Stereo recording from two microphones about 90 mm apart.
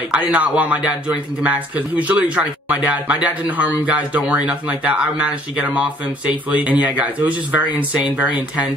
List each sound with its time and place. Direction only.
0.1 s speech: 15° right (ahead or behind)